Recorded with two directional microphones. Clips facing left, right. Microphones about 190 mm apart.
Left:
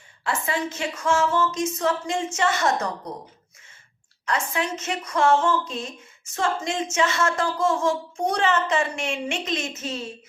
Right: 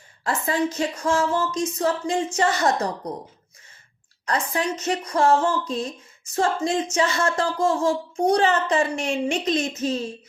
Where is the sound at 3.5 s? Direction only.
35° right (ahead or behind).